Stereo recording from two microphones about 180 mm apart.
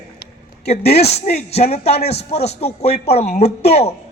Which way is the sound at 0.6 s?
35° left (ahead or behind).